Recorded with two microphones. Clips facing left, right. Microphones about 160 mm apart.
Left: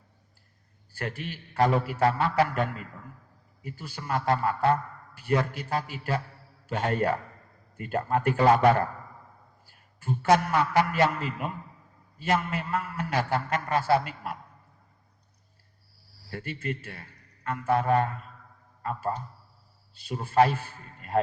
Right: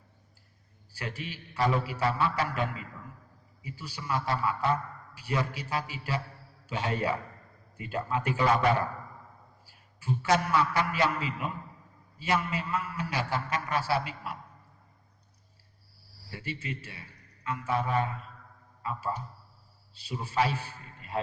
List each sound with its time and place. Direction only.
0.9 s a man's voice: 50° left (ahead or behind)
9.6 s a man's voice: 50° left (ahead or behind)
16.3 s a man's voice: 55° left (ahead or behind)